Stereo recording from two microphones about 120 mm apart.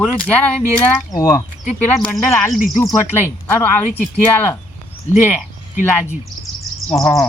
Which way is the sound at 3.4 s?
15° left (ahead or behind).